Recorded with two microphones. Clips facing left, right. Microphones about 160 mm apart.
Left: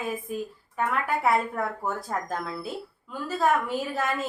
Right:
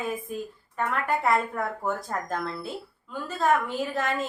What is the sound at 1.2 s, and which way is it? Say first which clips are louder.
A woman's voice: left 3 dB; 5° left (ahead or behind).